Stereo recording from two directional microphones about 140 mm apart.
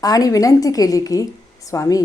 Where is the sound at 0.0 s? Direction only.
25° left (ahead or behind).